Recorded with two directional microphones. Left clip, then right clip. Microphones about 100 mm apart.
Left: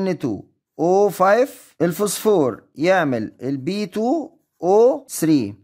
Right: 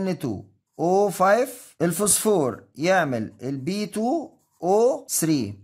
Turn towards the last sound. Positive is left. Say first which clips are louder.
# left 5 dB
turn(degrees=50)  # may be behind; listen again after turning